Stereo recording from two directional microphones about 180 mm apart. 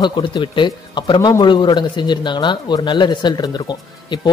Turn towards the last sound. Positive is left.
turn(degrees=25)  # may be behind; listen again after turning